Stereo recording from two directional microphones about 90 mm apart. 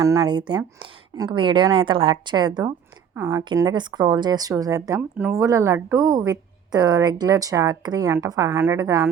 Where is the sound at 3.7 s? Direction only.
55° right (ahead or behind); by 6.0 s 30° right (ahead or behind).